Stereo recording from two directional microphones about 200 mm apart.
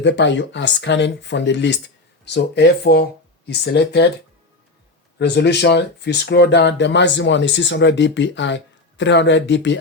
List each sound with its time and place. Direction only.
0.0 s speech: 60° left (ahead or behind)
5.2 s speech: 60° left (ahead or behind)